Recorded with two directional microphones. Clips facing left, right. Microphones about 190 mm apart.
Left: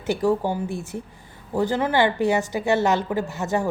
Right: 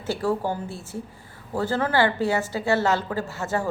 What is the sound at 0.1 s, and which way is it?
A woman's voice, 15° left (ahead or behind).